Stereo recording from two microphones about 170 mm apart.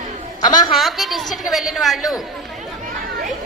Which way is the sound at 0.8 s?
Centre (ahead or behind).